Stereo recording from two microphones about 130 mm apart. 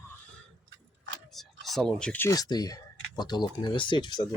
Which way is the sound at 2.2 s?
30° left (ahead or behind).